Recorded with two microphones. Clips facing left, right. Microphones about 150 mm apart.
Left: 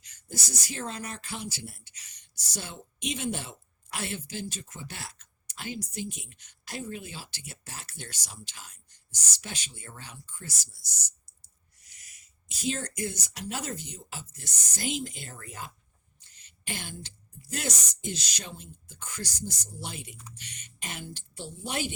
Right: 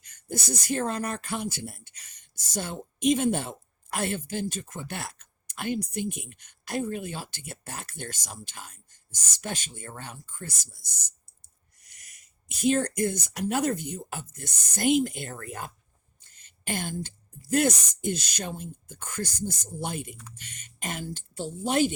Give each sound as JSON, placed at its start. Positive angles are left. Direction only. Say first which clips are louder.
{"t": 0.0, "sound": "speech", "louder": "right 7 dB", "side_deg": -55}